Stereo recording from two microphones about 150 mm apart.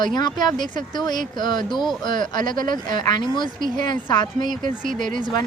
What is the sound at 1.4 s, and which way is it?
Speech, 30° left (ahead or behind).